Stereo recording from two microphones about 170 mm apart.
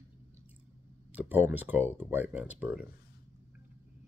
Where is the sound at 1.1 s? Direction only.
10° right (ahead or behind).